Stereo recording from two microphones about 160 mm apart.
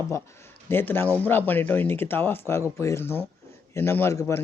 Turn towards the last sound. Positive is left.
turn(degrees=15)  # may be behind; listen again after turning